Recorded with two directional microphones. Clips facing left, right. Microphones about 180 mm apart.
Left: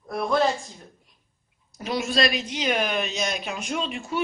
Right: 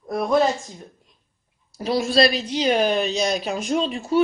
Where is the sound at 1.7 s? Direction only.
35° right (ahead or behind).